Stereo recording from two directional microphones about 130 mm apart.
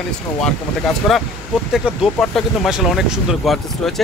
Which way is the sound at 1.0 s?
Centre (ahead or behind).